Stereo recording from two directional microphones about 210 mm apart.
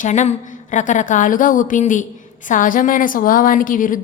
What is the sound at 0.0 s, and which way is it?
A woman's voice, 35° left (ahead or behind).